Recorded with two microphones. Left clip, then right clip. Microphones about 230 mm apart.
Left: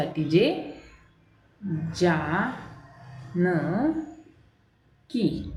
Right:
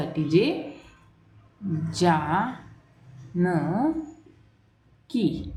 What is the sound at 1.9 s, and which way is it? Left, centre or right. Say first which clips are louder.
Speech: right 2 dB; centre.